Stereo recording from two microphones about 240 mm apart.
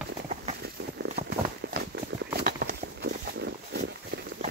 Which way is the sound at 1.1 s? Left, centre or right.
Right.